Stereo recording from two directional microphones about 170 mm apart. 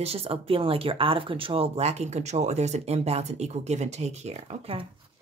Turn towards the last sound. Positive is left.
turn(degrees=-35)  # may be behind; listen again after turning